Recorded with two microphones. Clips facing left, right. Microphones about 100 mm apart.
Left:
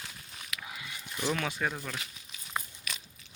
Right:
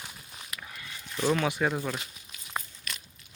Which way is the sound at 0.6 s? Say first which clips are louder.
Left 1 dB; 15° left (ahead or behind).